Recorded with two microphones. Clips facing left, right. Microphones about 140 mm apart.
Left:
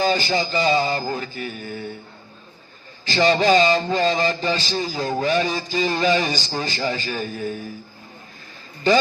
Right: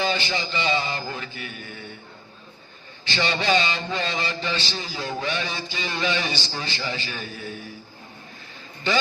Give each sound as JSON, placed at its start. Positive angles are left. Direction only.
{"t": 0.0, "sound": "a man's voice", "side_deg": 40}
{"t": 3.0, "sound": "a man's voice", "side_deg": 40}